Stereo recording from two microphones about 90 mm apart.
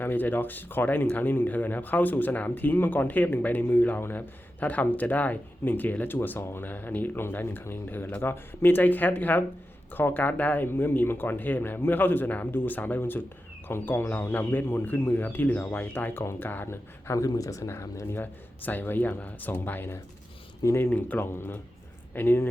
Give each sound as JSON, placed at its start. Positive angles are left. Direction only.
{"t": 0.0, "sound": "speech", "side_deg": 20}
{"t": 17.1, "sound": "speech", "side_deg": 40}